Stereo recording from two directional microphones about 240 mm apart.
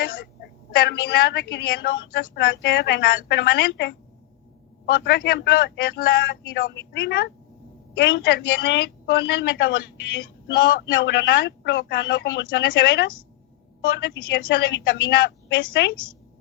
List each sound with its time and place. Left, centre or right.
0.8 s a woman's voice: left